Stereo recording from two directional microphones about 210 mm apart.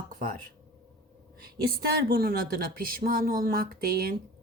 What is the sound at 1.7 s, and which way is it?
Speech, 45° right (ahead or behind).